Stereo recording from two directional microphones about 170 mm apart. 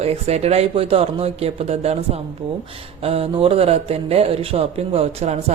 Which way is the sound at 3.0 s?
35° right (ahead or behind).